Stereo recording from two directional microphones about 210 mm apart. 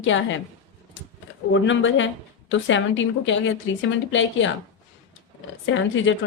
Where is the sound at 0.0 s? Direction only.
65° left (ahead or behind).